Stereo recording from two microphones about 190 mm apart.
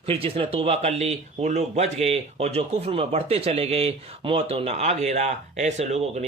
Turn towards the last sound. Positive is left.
turn(degrees=-35)  # may be behind; listen again after turning